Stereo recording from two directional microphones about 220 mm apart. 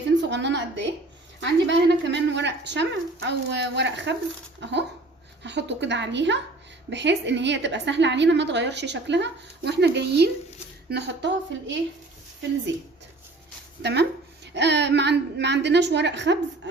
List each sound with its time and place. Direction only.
0.1 s a woman's voice: 55° right (ahead or behind)
13.8 s a woman's voice: 50° right (ahead or behind)